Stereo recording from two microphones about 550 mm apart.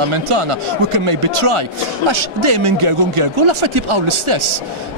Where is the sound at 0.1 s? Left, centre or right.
Right.